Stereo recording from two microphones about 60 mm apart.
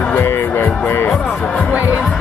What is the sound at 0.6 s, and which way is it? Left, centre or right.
Music, left.